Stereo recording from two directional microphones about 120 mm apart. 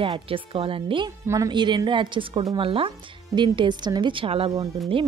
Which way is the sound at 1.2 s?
25° right (ahead or behind).